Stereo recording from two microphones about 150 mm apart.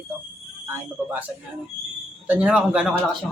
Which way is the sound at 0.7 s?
10° right (ahead or behind).